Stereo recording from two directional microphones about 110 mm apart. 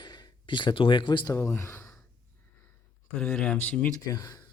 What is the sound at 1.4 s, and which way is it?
Speech, 25° left (ahead or behind).